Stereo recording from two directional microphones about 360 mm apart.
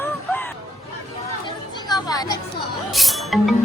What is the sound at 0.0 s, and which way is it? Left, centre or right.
Music, centre.